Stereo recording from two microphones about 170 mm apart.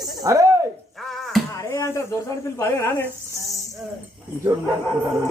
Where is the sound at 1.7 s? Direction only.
20° left (ahead or behind).